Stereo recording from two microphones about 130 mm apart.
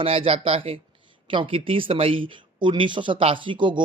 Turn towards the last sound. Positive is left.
turn(degrees=-40)  # may be behind; listen again after turning